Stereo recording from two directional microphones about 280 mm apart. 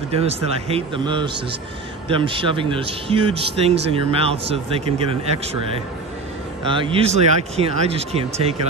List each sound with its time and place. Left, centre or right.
0.1 s speech: right
6.7 s speech: centre